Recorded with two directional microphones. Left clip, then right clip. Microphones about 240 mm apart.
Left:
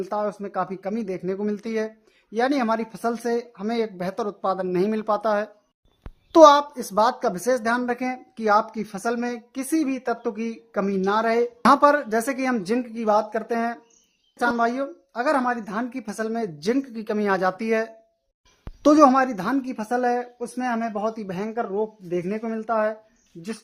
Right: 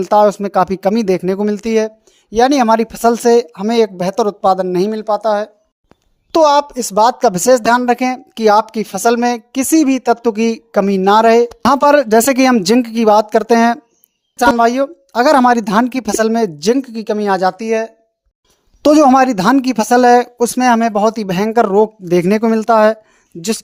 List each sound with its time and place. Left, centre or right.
0.0 s speech: right; by 5.5 s centre
6.3 s speech: right
18.8 s speech: right